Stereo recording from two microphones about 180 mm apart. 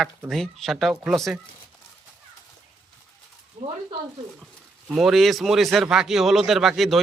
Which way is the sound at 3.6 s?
50° right (ahead or behind).